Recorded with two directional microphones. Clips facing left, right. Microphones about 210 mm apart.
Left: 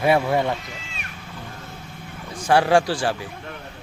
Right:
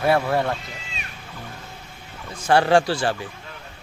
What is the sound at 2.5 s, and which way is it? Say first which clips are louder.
Speech: even; 10° left (ahead or behind).